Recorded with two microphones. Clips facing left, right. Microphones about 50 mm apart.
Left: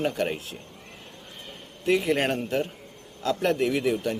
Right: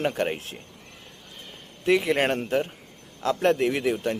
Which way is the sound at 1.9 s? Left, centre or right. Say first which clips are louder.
Right 2 dB; right.